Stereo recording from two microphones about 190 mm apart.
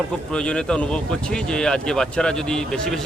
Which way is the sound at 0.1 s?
5° left (ahead or behind).